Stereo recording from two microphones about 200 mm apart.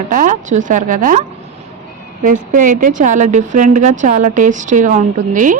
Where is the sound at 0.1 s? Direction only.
40° right (ahead or behind).